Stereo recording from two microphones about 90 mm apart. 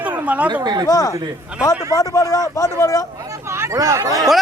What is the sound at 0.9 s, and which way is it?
A man's voice, 40° left (ahead or behind).